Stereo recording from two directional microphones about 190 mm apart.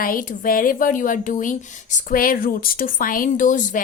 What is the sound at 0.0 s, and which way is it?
A woman's voice, 45° left (ahead or behind).